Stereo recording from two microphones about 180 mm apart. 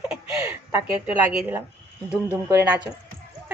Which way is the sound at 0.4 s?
10° right (ahead or behind).